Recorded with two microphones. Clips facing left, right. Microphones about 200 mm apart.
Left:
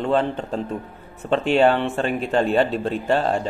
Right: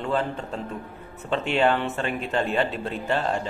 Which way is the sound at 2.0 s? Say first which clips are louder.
Left 5 dB; 35° left (ahead or behind).